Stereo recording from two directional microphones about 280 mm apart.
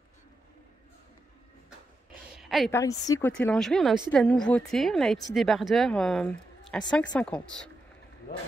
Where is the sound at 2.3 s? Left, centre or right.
Centre.